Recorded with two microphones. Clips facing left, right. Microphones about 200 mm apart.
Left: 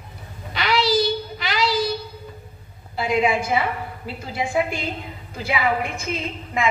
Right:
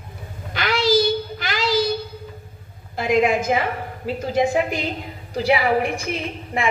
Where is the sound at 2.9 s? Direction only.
45° right (ahead or behind).